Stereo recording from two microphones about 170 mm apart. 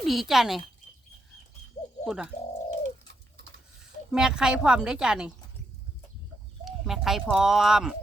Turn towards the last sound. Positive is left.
turn(degrees=0)  # may be behind; listen again after turning